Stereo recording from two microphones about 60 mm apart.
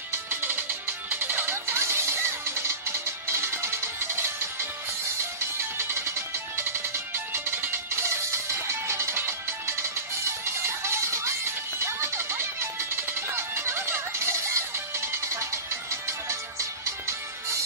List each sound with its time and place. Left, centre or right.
0.3 s music: right
3.3 s music: right
5.8 s music: right
8.0 s music: right